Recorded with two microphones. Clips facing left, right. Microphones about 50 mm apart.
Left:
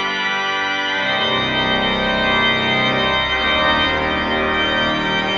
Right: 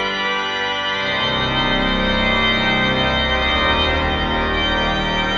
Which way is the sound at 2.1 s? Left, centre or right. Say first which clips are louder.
Left 1 dB; left.